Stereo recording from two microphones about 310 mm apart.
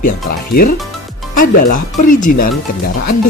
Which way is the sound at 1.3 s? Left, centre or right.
Left.